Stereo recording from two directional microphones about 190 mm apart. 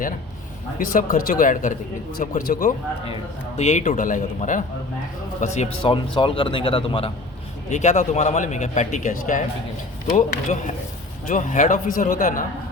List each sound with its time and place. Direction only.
0.8 s a man's voice: 45° left (ahead or behind)
5.8 s a man's voice: 25° left (ahead or behind); by 12.5 s 45° left (ahead or behind)